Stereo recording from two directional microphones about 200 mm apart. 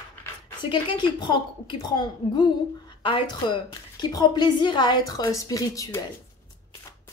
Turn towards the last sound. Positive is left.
turn(degrees=15)  # may be behind; listen again after turning